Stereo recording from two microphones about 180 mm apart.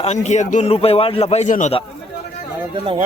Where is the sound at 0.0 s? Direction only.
40° left (ahead or behind).